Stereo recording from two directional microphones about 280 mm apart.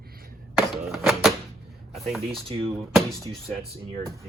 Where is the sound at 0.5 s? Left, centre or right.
Centre.